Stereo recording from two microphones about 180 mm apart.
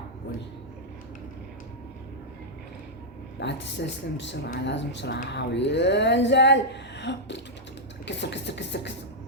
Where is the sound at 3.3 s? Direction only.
80° left.